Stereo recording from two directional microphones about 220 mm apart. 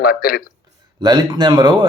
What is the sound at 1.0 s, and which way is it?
Speech, 20° right (ahead or behind).